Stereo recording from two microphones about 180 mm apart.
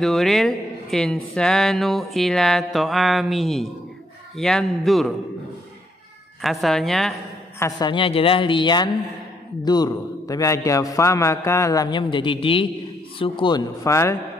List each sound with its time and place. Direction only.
0.0 s speech: centre (ahead or behind)
6.4 s speech: centre (ahead or behind)
7.5 s a man's voice: 15° left (ahead or behind)
7.9 s a man's voice: 30° left (ahead or behind)